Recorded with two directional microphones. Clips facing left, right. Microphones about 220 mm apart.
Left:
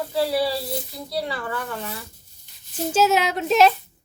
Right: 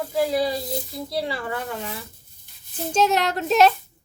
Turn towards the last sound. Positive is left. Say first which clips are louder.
# even
turn(degrees=0)  # may be behind; listen again after turning